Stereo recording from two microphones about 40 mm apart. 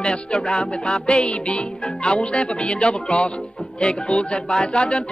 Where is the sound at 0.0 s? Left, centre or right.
Left.